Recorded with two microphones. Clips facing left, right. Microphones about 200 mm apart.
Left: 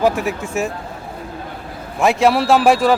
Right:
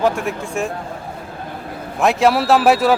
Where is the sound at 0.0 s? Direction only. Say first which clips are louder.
Left 1 dB; 5° left (ahead or behind).